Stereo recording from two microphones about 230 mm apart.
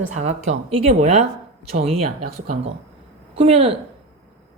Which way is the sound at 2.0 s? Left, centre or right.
Right.